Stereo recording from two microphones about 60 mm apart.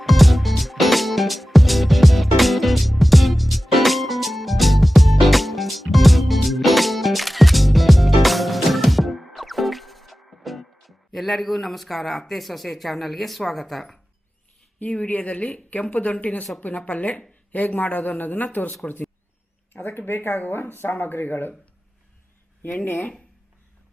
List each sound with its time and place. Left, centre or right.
0.0 s music: centre
14.8 s a woman's voice: left
22.6 s speech: left